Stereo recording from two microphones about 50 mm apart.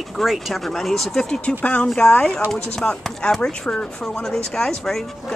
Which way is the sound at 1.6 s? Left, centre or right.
Left.